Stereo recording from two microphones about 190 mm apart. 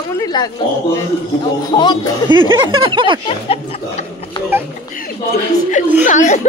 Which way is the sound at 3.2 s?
30° left (ahead or behind).